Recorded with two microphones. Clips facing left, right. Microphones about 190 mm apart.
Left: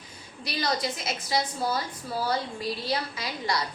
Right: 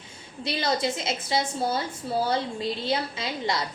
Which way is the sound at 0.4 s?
25° right (ahead or behind).